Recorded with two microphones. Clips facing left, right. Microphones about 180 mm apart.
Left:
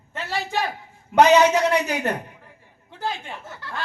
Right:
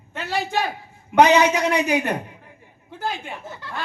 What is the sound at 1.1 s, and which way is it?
Speech, 15° right (ahead or behind).